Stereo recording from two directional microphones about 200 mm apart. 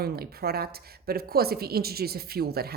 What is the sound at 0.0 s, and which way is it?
A woman's voice, 50° right (ahead or behind).